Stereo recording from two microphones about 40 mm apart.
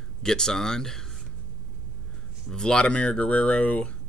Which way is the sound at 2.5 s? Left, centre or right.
Centre.